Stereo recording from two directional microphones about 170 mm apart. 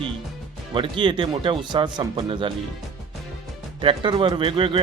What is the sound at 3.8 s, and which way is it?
Speech, 30° right (ahead or behind).